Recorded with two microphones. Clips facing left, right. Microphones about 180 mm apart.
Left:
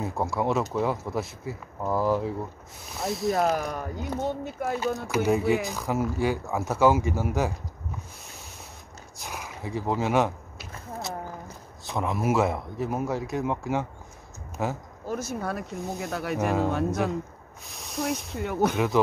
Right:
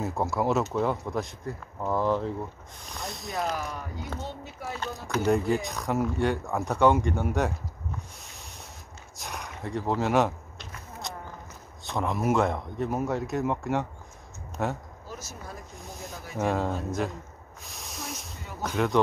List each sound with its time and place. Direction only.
0.0 s speech: centre (ahead or behind)
3.3 s speech: 50° left (ahead or behind)
5.0 s speech: 5° left (ahead or behind)
8.2 s a sound: centre (ahead or behind)
11.8 s speech: centre (ahead or behind)
15.0 s speech: 55° left (ahead or behind); by 15.7 s 70° left (ahead or behind)
15.9 s speech: 80° left
16.3 s speech: centre (ahead or behind)
16.7 s speech: 70° left (ahead or behind)
17.6 s speech: centre (ahead or behind)
18.3 s speech: 65° left (ahead or behind)